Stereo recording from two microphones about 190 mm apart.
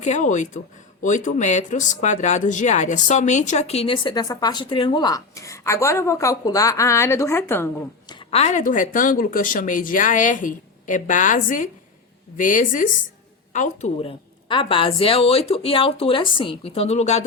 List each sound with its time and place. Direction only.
0.0 s speech: 40° left (ahead or behind); by 7.7 s 10° left (ahead or behind)
8.1 s speech: 35° left (ahead or behind)